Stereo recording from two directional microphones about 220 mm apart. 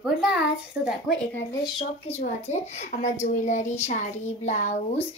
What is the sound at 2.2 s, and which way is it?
A woman's voice, 30° left (ahead or behind).